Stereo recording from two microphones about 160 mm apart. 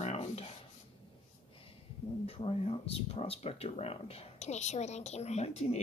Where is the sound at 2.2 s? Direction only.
35° left (ahead or behind).